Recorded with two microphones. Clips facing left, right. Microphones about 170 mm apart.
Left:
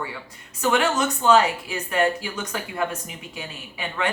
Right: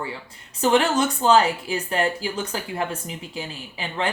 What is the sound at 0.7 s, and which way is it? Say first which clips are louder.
Speech: right 2 dB; 30° right (ahead or behind).